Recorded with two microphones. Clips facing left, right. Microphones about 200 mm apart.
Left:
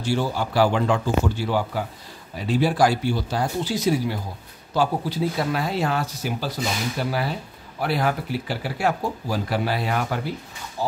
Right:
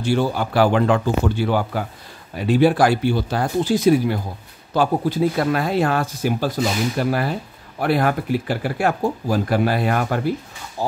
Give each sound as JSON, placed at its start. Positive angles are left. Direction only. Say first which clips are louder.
{"t": 0.0, "sound": "speech", "louder": "right 4 dB", "side_deg": -55}